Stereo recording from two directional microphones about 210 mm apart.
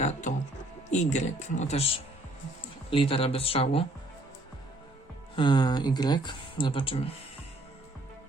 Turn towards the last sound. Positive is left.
turn(degrees=25)  # may be behind; listen again after turning